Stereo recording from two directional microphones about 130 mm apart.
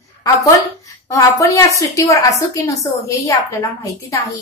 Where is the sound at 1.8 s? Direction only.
25° left (ahead or behind).